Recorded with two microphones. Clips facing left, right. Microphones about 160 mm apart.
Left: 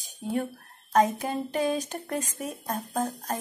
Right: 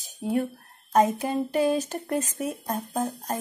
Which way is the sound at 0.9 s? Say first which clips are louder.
Right 2 dB; 5° right (ahead or behind).